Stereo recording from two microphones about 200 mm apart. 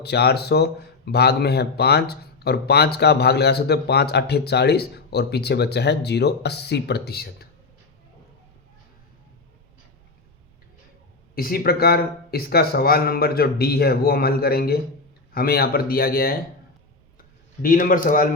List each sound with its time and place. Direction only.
0.0 s speech: 55° left (ahead or behind)
11.3 s speech: 45° left (ahead or behind)
17.2 s a sound: 45° left (ahead or behind)